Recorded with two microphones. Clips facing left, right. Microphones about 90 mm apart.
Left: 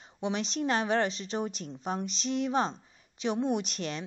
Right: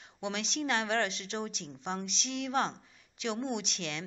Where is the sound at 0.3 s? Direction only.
35° left (ahead or behind).